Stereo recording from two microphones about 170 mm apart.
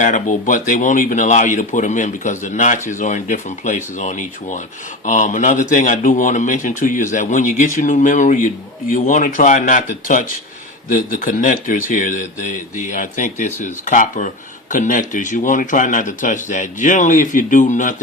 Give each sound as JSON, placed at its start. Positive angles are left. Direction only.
{"t": 0.0, "sound": "speech", "side_deg": 50}